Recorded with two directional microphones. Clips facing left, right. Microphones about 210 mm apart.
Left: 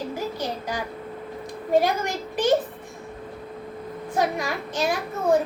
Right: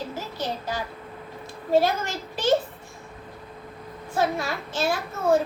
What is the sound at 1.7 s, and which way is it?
Speech, 15° left (ahead or behind).